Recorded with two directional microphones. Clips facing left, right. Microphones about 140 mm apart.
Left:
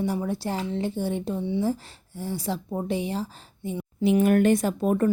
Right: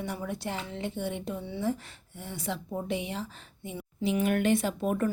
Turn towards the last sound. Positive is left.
turn(degrees=35)  # may be behind; listen again after turning